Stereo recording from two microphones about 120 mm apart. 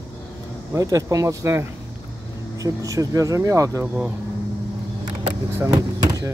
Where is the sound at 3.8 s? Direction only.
10° right (ahead or behind).